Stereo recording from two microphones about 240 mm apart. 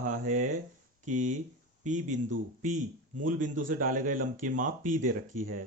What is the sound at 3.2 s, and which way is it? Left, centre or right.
Speech, right.